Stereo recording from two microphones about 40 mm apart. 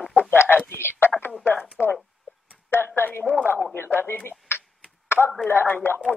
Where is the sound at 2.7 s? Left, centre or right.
Left.